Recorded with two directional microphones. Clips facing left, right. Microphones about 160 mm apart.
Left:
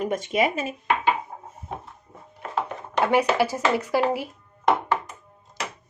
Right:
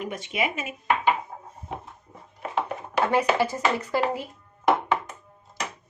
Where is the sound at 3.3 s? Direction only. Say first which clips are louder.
Left 2 dB; 10° left (ahead or behind).